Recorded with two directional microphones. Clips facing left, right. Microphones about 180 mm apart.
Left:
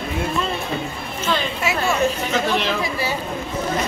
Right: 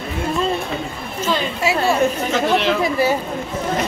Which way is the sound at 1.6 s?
35° right (ahead or behind).